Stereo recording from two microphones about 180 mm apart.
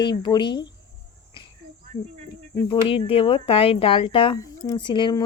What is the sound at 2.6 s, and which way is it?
Speech, 30° left (ahead or behind).